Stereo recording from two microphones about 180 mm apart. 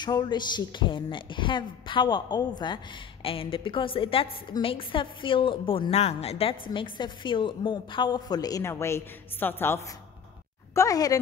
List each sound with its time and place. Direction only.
0.0 s a woman's voice: 25° left (ahead or behind)